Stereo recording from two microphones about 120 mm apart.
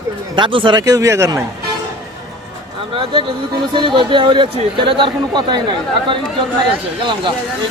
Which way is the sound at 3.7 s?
45° right (ahead or behind).